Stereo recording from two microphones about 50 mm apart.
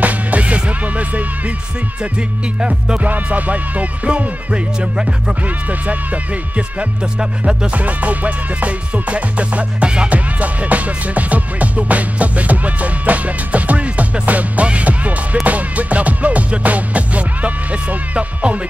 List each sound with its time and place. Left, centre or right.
0.0 s music: right
3.1 s music: right
6.5 s music: right
7.7 s music: right